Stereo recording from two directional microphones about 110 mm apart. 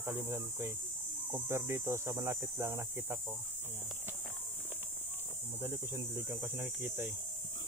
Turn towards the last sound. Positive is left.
turn(degrees=-20)  # may be behind; listen again after turning